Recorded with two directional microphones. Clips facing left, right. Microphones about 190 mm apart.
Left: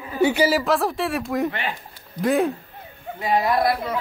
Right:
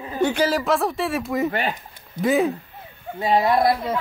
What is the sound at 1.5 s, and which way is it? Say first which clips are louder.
Speech: right 4 dB; 40° right (ahead or behind).